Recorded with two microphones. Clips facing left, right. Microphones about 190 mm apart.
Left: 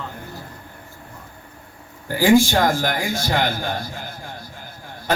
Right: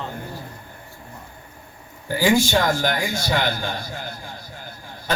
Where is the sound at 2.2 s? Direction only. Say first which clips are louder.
Left 4 dB; 50° left (ahead or behind).